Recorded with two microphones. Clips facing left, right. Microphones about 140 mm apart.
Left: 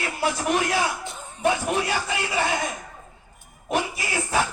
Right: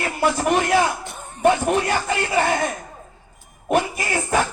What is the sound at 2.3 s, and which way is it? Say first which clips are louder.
Speech: right 5 dB; 55° right (ahead or behind).